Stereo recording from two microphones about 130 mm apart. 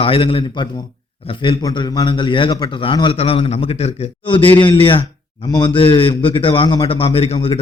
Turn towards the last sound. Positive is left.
turn(degrees=45)  # may be behind; listen again after turning